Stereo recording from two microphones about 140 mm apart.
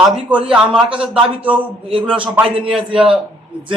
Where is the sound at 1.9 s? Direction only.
40° right (ahead or behind).